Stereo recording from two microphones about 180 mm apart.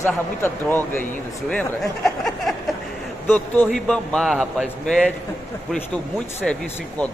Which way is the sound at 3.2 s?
10° left (ahead or behind).